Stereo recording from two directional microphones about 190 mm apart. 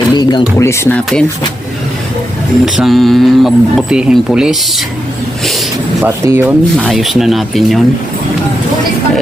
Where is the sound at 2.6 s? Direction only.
Centre (ahead or behind).